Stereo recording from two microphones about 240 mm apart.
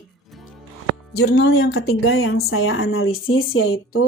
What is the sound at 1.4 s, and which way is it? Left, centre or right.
Speech, left.